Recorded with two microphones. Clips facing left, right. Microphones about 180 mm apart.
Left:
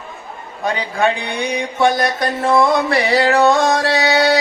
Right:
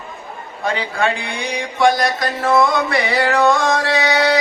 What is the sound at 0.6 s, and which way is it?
Music, 20° left (ahead or behind).